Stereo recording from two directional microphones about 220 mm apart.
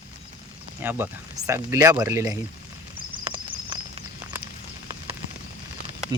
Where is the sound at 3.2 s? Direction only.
20° right (ahead or behind).